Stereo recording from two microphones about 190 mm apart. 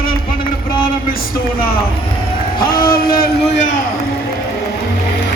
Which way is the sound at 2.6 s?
50° left (ahead or behind).